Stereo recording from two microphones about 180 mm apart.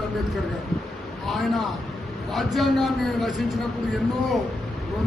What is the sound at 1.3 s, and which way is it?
A man's voice, centre (ahead or behind).